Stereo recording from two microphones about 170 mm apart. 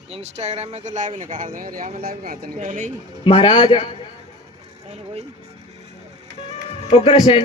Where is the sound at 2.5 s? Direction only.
50° right (ahead or behind).